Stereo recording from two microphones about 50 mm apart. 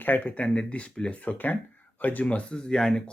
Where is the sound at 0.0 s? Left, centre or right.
Left.